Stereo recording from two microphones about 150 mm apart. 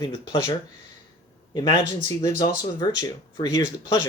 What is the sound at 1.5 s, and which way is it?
Speech, 30° left (ahead or behind).